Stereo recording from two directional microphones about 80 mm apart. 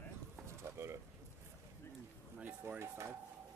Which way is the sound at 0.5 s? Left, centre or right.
Right.